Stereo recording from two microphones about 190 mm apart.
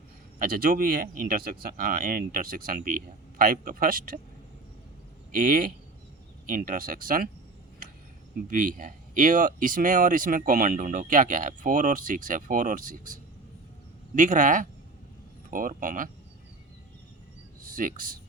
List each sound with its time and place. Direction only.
0.3 s speech: 50° right (ahead or behind)
5.3 s speech: 50° right (ahead or behind)
8.4 s speech: 45° right (ahead or behind)
14.2 s speech: 45° right (ahead or behind)
17.6 s speech: 45° right (ahead or behind)